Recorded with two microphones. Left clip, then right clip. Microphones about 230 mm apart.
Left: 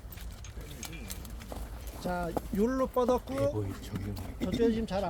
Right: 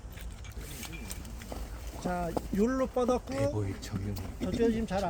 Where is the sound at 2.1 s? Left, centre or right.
Centre.